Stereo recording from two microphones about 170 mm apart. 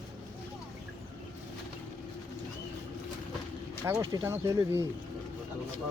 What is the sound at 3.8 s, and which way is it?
Speech, 20° right (ahead or behind).